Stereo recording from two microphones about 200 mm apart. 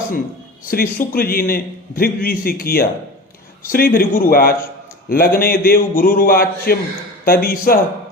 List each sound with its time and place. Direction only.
0.7 s a man's voice: 45° left (ahead or behind)